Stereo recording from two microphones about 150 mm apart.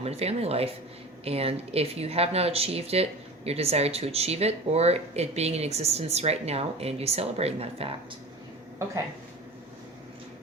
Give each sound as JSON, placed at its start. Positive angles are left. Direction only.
{"t": 0.0, "sound": "speech", "side_deg": -45}